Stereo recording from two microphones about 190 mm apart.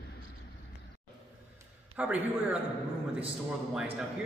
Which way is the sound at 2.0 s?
5° right (ahead or behind).